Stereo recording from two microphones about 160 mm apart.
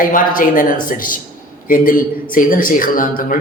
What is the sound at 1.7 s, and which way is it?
A woman's voice, 60° left (ahead or behind).